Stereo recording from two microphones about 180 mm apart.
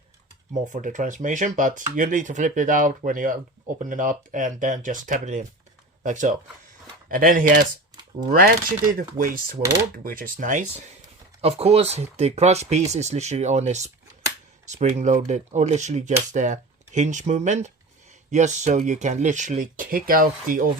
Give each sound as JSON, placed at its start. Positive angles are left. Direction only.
{"t": 0.7, "sound": "speech", "side_deg": -45}
{"t": 11.3, "sound": "speech", "side_deg": -35}